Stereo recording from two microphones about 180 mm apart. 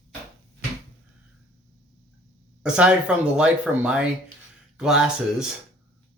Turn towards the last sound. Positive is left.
turn(degrees=-5)  # may be behind; listen again after turning